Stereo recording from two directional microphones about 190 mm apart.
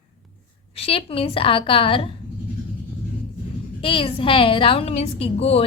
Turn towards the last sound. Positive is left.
turn(degrees=30)  # may be behind; listen again after turning